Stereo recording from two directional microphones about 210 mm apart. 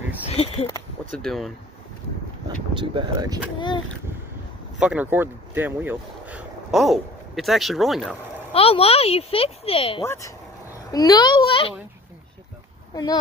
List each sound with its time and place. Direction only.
0.3 s speech: 30° left (ahead or behind)
1.1 s speech: centre (ahead or behind)
2.4 s speech: 20° right (ahead or behind)
3.5 s speech: 20° left (ahead or behind)
4.7 s speech: 5° right (ahead or behind)
8.5 s speech: 25° left (ahead or behind)
10.0 s speech: 15° left (ahead or behind)
12.9 s speech: 15° left (ahead or behind)